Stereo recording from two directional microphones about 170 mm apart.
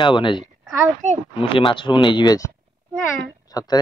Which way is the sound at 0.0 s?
30° left (ahead or behind).